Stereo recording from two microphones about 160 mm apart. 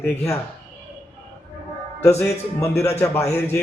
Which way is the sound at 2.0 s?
20° left (ahead or behind).